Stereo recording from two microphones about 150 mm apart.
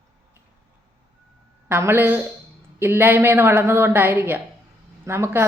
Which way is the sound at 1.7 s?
15° right (ahead or behind).